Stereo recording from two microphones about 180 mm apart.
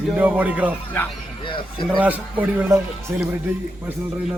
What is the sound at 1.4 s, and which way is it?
Speech, 30° left (ahead or behind).